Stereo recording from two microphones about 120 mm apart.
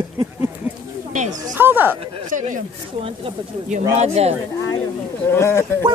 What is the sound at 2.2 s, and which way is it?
Speech, 90° right.